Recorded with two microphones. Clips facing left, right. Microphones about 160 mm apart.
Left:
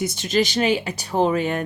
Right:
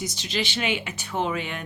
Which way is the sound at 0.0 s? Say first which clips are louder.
Left 8 dB; 55° left (ahead or behind).